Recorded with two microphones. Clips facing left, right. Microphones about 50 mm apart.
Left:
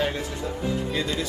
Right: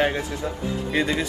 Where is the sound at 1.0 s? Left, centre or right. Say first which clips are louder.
Right 4 dB; right.